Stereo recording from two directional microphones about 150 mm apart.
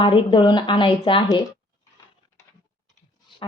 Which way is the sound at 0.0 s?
35° left (ahead or behind).